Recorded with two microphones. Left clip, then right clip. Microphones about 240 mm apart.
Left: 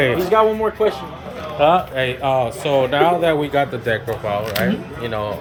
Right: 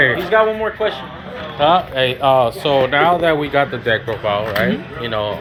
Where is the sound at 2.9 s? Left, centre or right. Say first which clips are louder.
Right 2 dB; left.